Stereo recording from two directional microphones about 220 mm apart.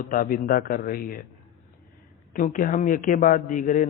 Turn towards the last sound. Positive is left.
turn(degrees=35)  # may be behind; listen again after turning